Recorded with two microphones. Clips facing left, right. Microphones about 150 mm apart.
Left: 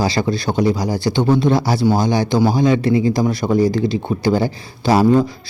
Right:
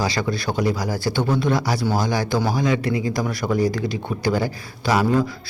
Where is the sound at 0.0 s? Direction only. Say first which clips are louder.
Left 5 dB; 30° left (ahead or behind).